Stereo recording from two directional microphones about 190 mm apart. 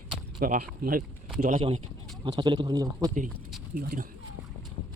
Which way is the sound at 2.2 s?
25° right (ahead or behind).